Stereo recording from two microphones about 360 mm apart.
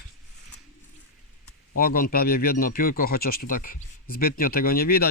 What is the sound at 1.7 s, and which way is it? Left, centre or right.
Speech, left.